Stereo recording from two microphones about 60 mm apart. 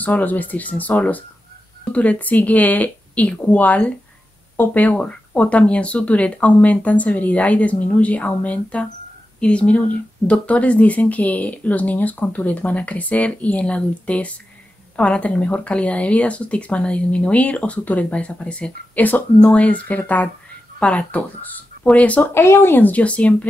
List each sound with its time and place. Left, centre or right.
0.0 s speech: left
22.3 s speech: left